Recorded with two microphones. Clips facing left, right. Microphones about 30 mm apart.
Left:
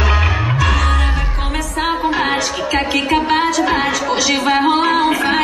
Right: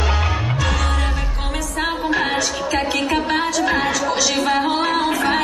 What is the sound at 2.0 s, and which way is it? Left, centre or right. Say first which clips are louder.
Music: left 3 dB; centre.